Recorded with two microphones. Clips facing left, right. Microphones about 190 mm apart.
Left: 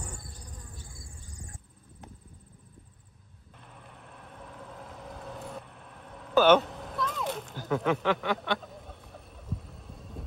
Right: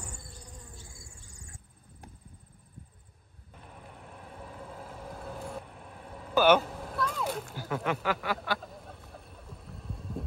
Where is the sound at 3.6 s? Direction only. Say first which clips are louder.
Right 2 dB; 5° right (ahead or behind).